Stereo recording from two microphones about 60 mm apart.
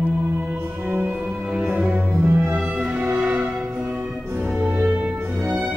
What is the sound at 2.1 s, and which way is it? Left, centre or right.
Music, right.